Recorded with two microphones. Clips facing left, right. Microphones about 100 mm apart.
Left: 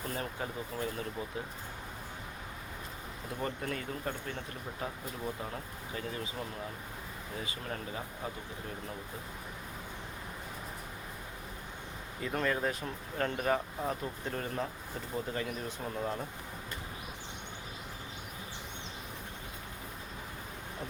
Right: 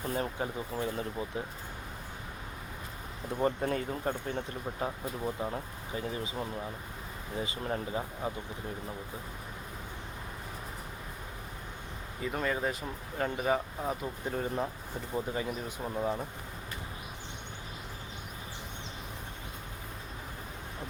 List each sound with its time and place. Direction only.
0.1 s speech: 25° right (ahead or behind)
3.4 s speech: 30° right (ahead or behind)
7.3 s speech: 25° right (ahead or behind)
12.2 s speech: 5° right (ahead or behind)